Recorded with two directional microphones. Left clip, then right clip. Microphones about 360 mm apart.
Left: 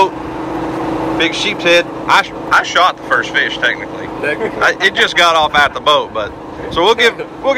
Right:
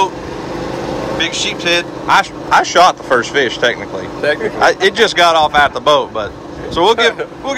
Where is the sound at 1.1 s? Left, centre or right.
Centre.